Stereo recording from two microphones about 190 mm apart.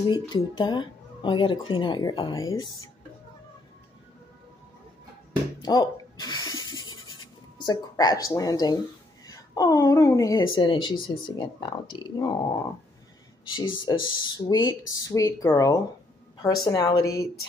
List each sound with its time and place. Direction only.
0.1 s speech: 25° left (ahead or behind)
5.6 s writing: 20° left (ahead or behind)
7.6 s a woman's voice: 20° left (ahead or behind)
13.8 s speech: 25° left (ahead or behind)